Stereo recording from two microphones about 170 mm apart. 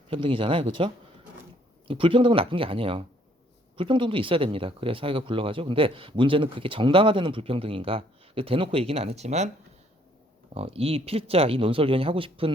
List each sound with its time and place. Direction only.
0.1 s speech: 30° right (ahead or behind)
10.5 s speech: 35° right (ahead or behind)